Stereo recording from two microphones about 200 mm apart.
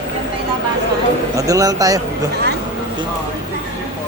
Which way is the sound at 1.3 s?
15° right (ahead or behind).